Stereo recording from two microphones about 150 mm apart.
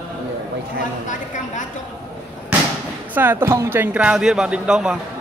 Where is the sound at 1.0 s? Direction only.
55° left (ahead or behind).